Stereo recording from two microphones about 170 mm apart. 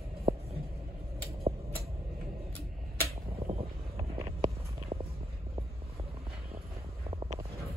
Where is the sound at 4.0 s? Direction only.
35° right (ahead or behind).